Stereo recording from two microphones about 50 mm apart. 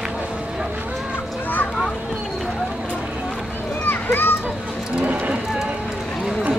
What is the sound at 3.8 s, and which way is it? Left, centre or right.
Children playing, left.